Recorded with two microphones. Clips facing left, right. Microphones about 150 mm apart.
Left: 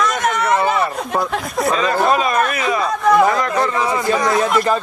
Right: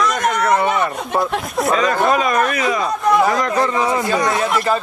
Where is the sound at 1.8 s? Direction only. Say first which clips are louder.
Even; 25° left (ahead or behind).